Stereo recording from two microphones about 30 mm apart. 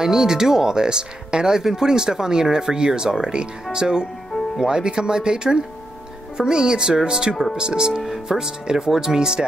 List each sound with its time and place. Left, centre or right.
0.0 s speech: centre
7.9 s speech: centre
8.4 s speech: right